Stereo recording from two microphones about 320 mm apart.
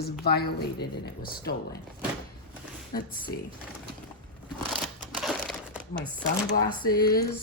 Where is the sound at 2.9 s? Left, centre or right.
Left.